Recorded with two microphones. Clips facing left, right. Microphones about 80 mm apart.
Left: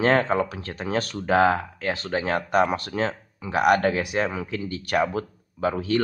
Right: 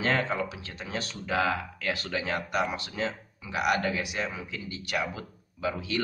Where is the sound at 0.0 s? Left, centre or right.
Left.